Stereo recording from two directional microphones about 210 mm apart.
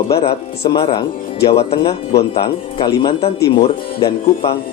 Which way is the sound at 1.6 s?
25° left (ahead or behind).